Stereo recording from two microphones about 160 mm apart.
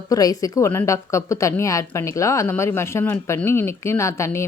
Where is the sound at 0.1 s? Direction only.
20° left (ahead or behind).